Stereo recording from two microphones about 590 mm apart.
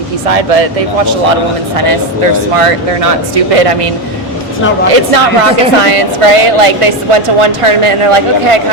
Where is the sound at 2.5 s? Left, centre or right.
Right.